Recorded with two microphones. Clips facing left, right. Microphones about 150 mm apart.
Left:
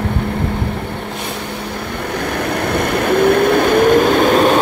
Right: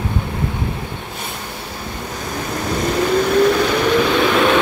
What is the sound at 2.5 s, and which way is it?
Vehicle, 65° left (ahead or behind).